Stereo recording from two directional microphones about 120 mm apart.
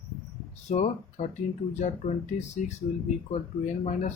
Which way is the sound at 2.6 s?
90° left.